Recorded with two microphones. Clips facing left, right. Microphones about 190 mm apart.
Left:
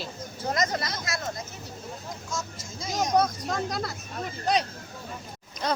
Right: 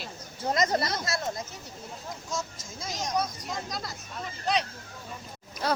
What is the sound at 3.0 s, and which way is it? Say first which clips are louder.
Speech: left 7 dB; 60° left (ahead or behind).